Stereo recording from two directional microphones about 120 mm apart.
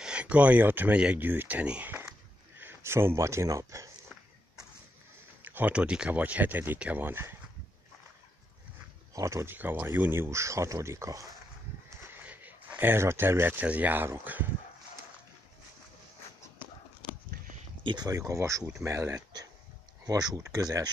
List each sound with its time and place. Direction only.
0.0 s speech: 10° right (ahead or behind)
2.0 s a sound: 20° right (ahead or behind)
5.4 s speech: 15° right (ahead or behind)
9.1 s speech: 25° right (ahead or behind)
17.8 s speech: 35° right (ahead or behind)